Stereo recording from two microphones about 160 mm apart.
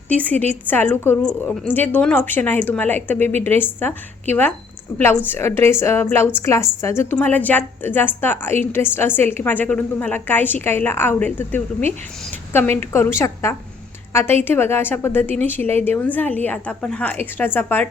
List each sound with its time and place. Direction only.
0.1 s a woman's voice: 10° left (ahead or behind)